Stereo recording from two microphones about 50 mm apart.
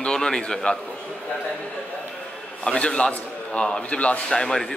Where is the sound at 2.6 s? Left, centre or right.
Centre.